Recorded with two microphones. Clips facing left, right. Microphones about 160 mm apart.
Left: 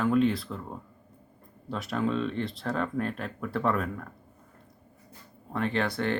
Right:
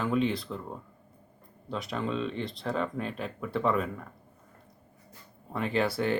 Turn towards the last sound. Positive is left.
turn(degrees=-5)  # may be behind; listen again after turning